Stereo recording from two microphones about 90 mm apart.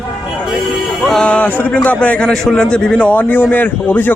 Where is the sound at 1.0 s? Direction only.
5° left (ahead or behind).